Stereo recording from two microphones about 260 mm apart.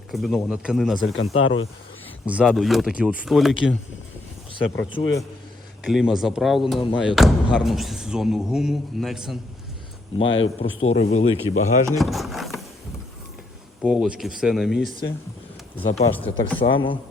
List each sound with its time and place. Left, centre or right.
0.1 s speech: centre
1.0 s speech: left
2.2 s speech: centre
5.8 s speech: centre
10.2 s speech: left
10.6 s speech: left
11.9 s wood: centre
13.8 s speech: centre
15.8 s speech: left
16.1 s speech: centre
16.6 s speech: centre